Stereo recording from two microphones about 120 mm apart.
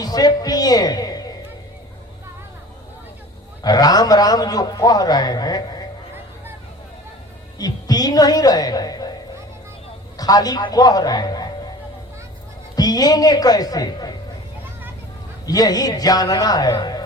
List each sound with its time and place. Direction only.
0.0 s a woman's voice: 35° left (ahead or behind)
3.6 s a man's voice: 30° left (ahead or behind)
7.6 s a man's voice: 35° left (ahead or behind)
10.2 s a man's voice: 30° left (ahead or behind)
12.7 s a man's voice: 35° left (ahead or behind)
15.4 s a man's voice: 30° left (ahead or behind)